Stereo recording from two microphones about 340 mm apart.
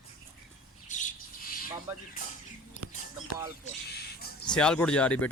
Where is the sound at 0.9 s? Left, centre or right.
Left.